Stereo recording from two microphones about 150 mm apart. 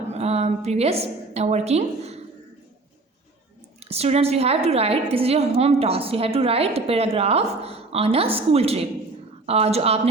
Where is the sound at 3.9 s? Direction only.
45° right (ahead or behind).